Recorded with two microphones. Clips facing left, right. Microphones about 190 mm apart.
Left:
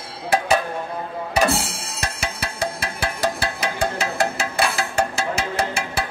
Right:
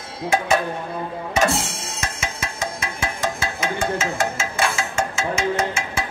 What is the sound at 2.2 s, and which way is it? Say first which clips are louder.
Music: left 4 dB; 35° left (ahead or behind).